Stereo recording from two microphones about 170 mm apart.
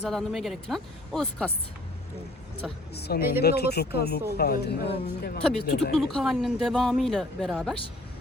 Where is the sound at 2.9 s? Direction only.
75° left (ahead or behind).